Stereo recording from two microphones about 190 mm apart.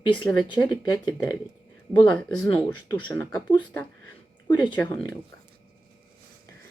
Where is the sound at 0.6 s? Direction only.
15° left (ahead or behind).